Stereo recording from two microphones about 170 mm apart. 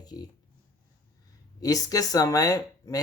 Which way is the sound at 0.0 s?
25° left (ahead or behind).